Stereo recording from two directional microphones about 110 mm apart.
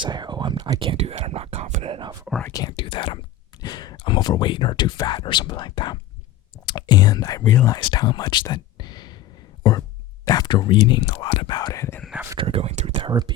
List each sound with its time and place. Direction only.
0.0 s a sound: 40° right (ahead or behind)
0.8 s whispering: 60° right (ahead or behind); by 2.0 s 80° right
2.4 s whispering: 30° left (ahead or behind)
2.7 s speech: 50° left (ahead or behind)
3.6 s speech: 40° left (ahead or behind)
7.8 s speech: 45° left (ahead or behind)
10.2 s speech: 40° left (ahead or behind)
11.0 s speech: 60° left (ahead or behind); by 11.7 s 40° left (ahead or behind)
11.7 s speech: 25° left (ahead or behind)
12.4 s speech: 60° right (ahead or behind)
13.1 s speech: 40° right (ahead or behind)